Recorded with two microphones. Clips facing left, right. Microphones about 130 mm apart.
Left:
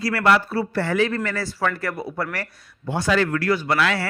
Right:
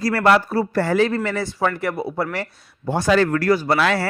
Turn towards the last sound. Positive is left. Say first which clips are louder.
# right 3 dB
turn(degrees=-40)  # may be behind; listen again after turning